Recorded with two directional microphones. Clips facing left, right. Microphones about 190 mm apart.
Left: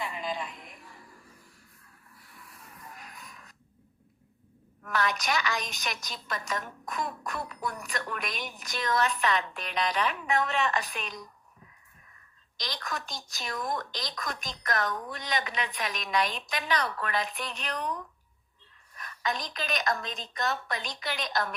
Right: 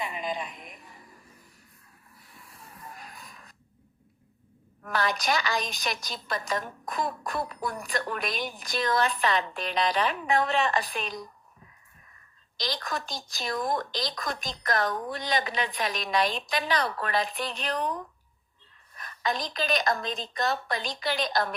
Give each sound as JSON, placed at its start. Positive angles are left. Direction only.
{"t": 0.0, "sound": "music", "side_deg": -20}
{"t": 2.1, "sound": "snort", "side_deg": -25}
{"t": 4.8, "sound": "a woman's voice", "side_deg": -35}
{"t": 12.5, "sound": "a woman's voice", "side_deg": -35}